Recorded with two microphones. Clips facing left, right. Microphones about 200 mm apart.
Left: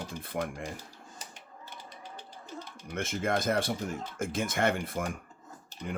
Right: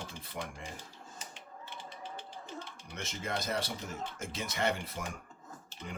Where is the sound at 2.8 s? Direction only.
55° left (ahead or behind).